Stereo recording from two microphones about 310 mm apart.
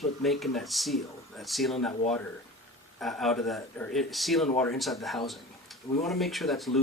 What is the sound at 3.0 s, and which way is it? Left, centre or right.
Speech, centre.